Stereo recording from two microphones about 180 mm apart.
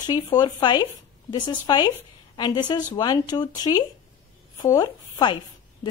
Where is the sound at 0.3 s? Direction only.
25° left (ahead or behind).